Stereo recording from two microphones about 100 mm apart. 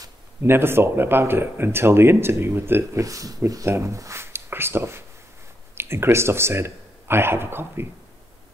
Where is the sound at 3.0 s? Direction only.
35° right (ahead or behind).